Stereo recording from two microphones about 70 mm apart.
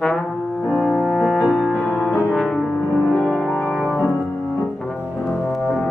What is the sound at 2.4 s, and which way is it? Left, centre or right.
Music, centre.